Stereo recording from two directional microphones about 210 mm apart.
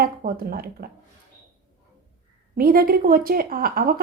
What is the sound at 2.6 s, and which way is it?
A woman's voice, 45° right (ahead or behind).